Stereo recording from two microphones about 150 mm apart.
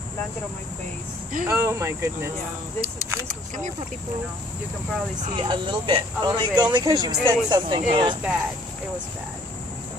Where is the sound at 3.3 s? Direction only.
60° right (ahead or behind).